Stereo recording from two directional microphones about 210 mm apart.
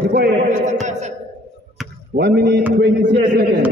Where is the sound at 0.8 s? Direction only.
35° right (ahead or behind).